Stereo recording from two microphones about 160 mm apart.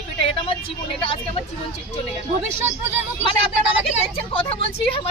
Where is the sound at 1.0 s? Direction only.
35° left (ahead or behind).